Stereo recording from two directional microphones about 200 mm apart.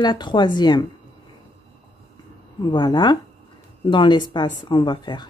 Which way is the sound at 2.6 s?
20° left (ahead or behind).